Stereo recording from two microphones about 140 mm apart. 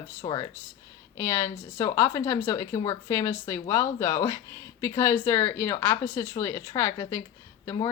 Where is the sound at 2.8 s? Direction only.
35° left (ahead or behind).